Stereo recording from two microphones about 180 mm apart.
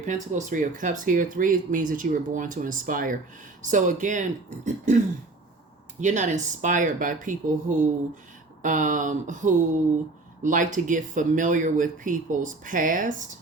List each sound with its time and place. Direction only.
0.0 s speech: 45° right (ahead or behind)
6.0 s speech: 45° right (ahead or behind)